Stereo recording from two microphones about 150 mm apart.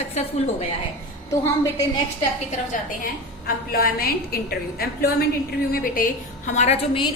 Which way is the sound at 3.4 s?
85° left.